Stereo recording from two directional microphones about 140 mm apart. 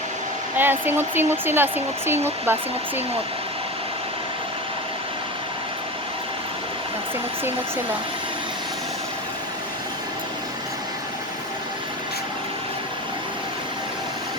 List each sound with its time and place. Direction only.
0.5 s speech: 15° right (ahead or behind)